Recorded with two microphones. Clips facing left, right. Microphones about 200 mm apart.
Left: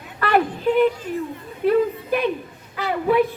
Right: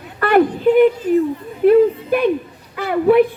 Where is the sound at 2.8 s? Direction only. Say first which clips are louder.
Right 6 dB; 55° right (ahead or behind).